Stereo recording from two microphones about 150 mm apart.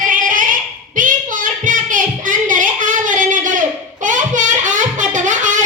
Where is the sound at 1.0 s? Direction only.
60° right (ahead or behind).